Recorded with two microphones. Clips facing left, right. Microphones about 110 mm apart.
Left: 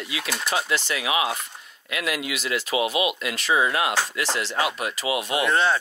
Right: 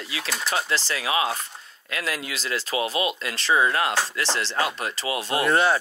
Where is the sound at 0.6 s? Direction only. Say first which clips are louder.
Left 1 dB; 35° right (ahead or behind).